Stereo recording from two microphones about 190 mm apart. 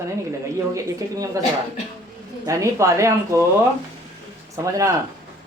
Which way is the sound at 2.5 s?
15° right (ahead or behind).